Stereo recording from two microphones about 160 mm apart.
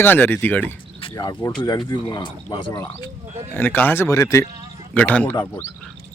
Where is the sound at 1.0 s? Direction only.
25° left (ahead or behind).